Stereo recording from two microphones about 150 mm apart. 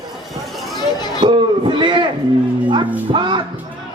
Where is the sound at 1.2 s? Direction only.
30° right (ahead or behind).